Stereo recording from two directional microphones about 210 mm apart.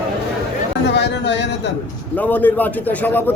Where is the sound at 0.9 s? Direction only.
55° left (ahead or behind).